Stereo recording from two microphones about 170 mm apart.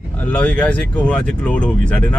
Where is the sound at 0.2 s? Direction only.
10° left (ahead or behind).